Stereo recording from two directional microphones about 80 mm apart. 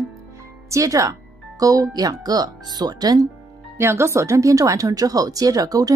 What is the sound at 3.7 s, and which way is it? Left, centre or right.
Speech, right.